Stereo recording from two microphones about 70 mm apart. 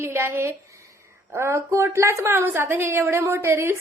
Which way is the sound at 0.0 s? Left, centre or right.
Right.